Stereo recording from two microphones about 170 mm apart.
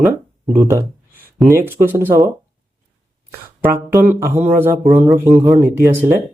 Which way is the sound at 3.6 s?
10° right (ahead or behind).